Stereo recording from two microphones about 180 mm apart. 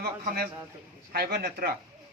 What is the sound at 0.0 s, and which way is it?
A man's voice, 60° right (ahead or behind).